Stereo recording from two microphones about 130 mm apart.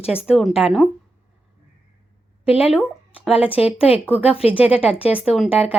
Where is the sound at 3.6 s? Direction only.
50° left (ahead or behind).